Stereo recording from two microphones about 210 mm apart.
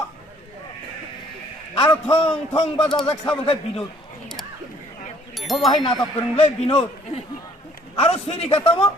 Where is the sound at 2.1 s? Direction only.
25° left (ahead or behind).